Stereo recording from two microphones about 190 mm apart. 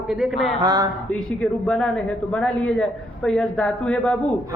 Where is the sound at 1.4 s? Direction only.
5° left (ahead or behind).